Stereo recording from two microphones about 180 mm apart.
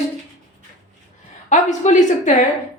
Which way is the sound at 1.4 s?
45° left (ahead or behind).